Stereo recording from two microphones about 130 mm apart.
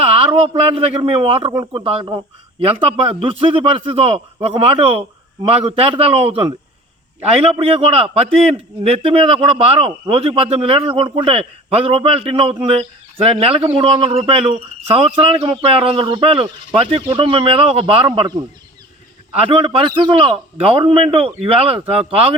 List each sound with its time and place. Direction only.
0.0 s a sound: 50° right (ahead or behind)
0.4 s a man's voice: 45° right (ahead or behind)
19.5 s a man's voice: 45° right (ahead or behind)